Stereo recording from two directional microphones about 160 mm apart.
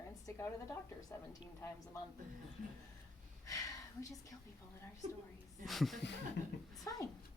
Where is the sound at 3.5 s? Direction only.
20° left (ahead or behind).